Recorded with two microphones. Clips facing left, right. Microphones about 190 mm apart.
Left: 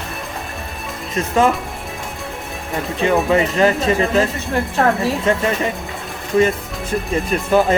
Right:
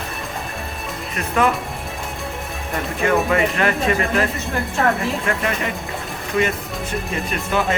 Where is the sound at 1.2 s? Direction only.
25° left (ahead or behind).